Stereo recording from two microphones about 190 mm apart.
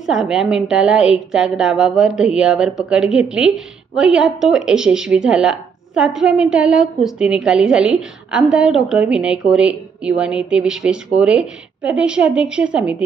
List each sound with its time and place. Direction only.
0.0 s a woman's voice: centre (ahead or behind)